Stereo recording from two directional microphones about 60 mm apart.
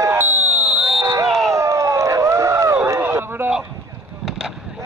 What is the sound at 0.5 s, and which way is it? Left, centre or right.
Fire alarm, centre.